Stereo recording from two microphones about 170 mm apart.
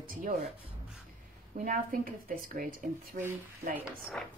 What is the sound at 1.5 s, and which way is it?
A woman's voice, 50° right (ahead or behind).